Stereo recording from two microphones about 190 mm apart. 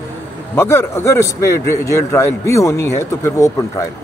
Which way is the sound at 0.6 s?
15° left (ahead or behind).